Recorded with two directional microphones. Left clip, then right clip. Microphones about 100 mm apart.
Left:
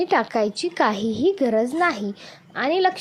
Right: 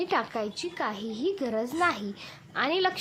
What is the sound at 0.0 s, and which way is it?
A woman's voice, 50° left (ahead or behind).